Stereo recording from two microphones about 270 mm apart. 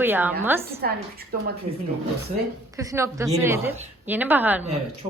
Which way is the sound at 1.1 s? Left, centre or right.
Right.